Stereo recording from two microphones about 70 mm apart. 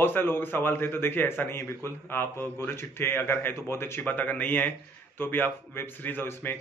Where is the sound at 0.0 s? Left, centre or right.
Left.